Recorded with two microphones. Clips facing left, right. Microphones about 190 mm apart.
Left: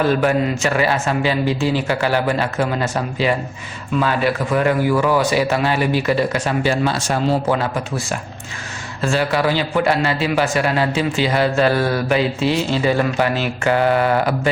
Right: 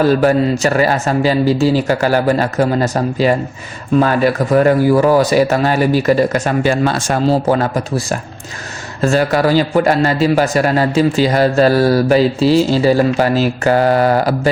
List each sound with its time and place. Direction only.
0.0 s a man's voice: 35° right (ahead or behind)